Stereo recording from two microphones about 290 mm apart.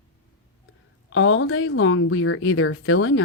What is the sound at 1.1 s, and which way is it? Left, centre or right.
Speech, left.